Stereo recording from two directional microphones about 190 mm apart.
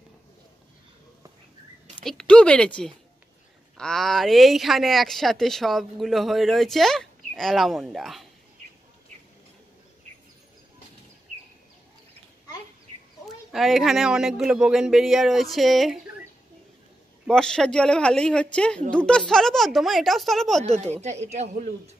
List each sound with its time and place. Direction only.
2.0 s speech: 5° left (ahead or behind)
13.5 s speech: centre (ahead or behind)
17.3 s speech: 5° left (ahead or behind)
20.6 s speech: 35° right (ahead or behind)